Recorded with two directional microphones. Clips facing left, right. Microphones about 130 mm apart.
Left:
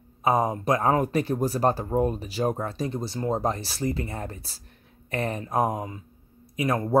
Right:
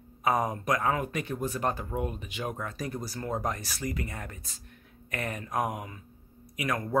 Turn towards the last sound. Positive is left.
turn(degrees=30)  # may be behind; listen again after turning